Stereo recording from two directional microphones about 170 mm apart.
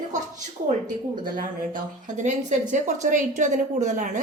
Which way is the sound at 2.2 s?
45° right (ahead or behind).